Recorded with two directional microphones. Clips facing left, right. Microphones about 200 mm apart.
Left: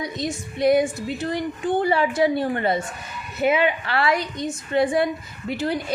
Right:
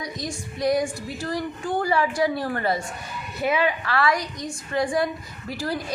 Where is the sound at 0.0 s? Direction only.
25° left (ahead or behind).